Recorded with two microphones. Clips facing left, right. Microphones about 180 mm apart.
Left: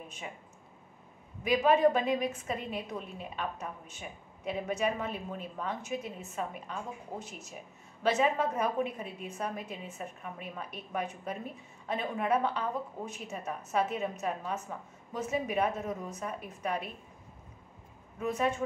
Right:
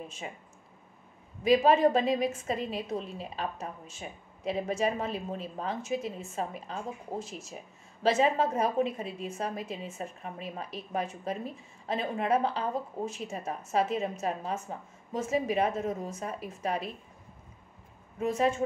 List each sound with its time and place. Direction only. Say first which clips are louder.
1.4 s a woman's voice: right 2 dB; 30° right (ahead or behind)
18.2 s a woman's voice: right 3 dB; 30° right (ahead or behind)